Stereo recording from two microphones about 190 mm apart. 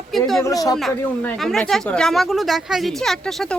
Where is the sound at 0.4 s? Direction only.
20° left (ahead or behind).